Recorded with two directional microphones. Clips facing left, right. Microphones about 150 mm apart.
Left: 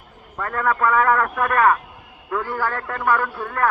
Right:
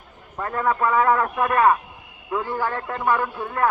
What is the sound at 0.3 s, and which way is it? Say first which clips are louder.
Speech: left 1 dB; 15° right (ahead or behind).